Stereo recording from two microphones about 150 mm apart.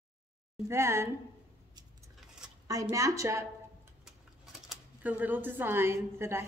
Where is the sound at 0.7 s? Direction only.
20° right (ahead or behind).